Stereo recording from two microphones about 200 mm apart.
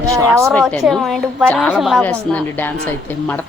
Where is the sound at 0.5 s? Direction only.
Centre (ahead or behind).